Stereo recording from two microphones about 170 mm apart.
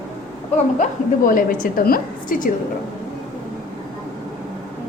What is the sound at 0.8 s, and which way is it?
A woman's voice, 50° left (ahead or behind).